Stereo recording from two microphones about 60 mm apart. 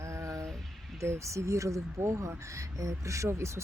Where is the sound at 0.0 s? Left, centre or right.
Right.